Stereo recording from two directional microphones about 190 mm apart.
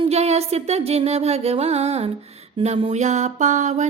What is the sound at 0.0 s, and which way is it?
Music, 35° right (ahead or behind).